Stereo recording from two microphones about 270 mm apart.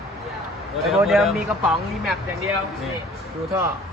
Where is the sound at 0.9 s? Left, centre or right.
Centre.